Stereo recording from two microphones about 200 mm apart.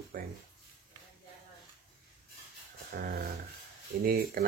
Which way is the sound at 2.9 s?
50° right (ahead or behind).